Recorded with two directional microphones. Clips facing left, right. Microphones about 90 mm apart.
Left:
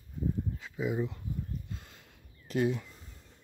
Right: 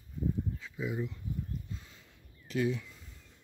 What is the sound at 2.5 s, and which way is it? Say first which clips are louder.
Speech: left 2 dB; 45° left (ahead or behind).